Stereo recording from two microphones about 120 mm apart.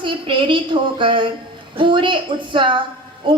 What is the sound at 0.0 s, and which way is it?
A woman's voice, 45° right (ahead or behind).